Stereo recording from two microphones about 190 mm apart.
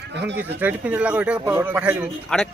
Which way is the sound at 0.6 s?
10° right (ahead or behind).